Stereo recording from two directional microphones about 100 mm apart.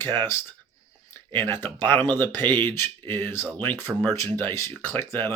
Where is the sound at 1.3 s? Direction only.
20° left (ahead or behind).